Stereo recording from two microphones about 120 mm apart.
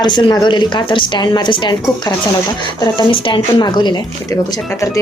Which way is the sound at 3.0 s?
40° left (ahead or behind).